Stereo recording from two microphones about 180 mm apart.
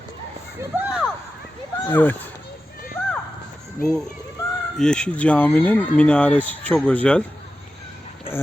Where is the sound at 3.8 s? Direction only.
50° left (ahead or behind).